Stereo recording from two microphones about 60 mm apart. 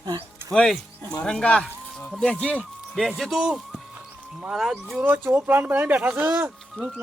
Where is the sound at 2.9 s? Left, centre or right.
Centre.